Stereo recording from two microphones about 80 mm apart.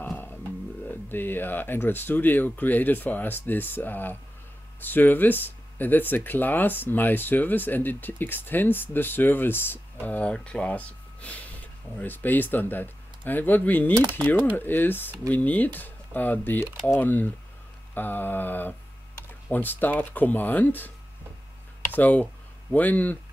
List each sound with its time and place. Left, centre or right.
0.0 s music: left
1.0 s speech: left